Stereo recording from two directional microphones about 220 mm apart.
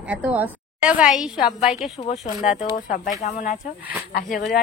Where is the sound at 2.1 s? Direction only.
35° left (ahead or behind).